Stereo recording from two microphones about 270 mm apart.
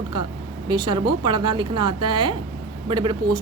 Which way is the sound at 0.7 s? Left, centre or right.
Centre.